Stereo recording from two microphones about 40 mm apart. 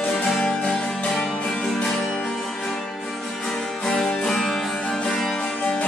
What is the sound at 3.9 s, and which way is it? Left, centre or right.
Music, centre.